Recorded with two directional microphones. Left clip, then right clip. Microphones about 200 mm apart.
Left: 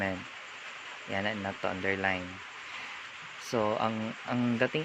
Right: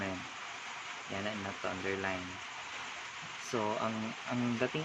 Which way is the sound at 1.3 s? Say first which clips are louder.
Left 3 dB; 35° left (ahead or behind).